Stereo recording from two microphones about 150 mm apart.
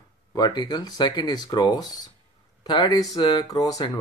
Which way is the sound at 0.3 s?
25° left (ahead or behind).